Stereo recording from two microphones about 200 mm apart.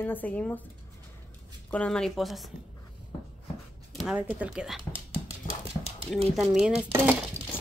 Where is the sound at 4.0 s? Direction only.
5° right (ahead or behind).